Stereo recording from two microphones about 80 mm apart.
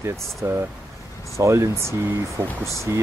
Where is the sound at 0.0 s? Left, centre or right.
Right.